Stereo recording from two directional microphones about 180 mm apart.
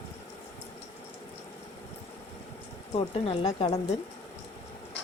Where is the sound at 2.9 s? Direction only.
35° left (ahead or behind).